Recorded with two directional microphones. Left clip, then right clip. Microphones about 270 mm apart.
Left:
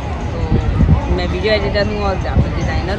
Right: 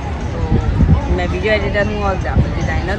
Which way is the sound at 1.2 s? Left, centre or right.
Centre.